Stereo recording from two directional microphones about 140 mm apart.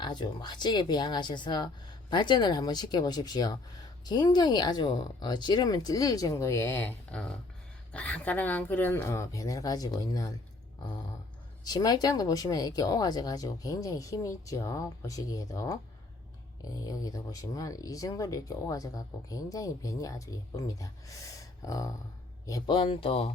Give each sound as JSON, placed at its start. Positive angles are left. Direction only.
{"t": 0.0, "sound": "speech", "side_deg": 30}
{"t": 11.6, "sound": "speech", "side_deg": 30}
{"t": 22.7, "sound": "speech", "side_deg": 40}